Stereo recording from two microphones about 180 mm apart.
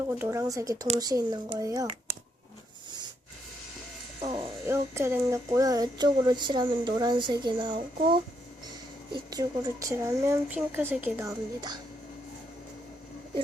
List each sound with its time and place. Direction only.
0.1 s speech: 15° right (ahead or behind)
4.2 s a sound: 25° right (ahead or behind)
4.6 s speech: 15° right (ahead or behind)
9.1 s speech: 20° right (ahead or behind)